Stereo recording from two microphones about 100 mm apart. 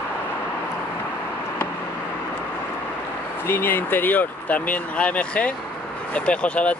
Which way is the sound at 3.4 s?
20° left (ahead or behind).